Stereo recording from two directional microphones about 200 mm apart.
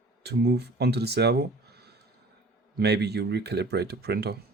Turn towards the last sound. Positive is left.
turn(degrees=-50)  # may be behind; listen again after turning